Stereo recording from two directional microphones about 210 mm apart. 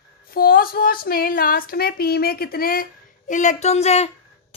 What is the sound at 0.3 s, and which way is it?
A woman's voice, 45° left (ahead or behind).